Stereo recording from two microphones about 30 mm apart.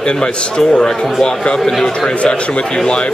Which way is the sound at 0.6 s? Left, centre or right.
Left.